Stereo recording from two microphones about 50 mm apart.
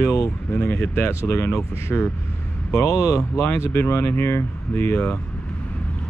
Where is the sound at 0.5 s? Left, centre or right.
Left.